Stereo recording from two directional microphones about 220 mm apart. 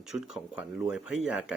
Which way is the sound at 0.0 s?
Centre (ahead or behind).